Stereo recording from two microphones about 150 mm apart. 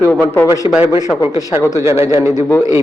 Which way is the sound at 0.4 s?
25° left (ahead or behind).